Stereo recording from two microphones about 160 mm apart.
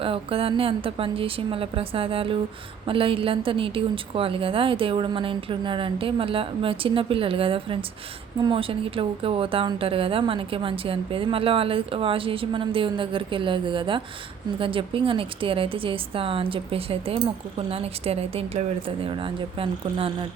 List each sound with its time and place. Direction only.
0.0 s a woman's voice: 35° right (ahead or behind)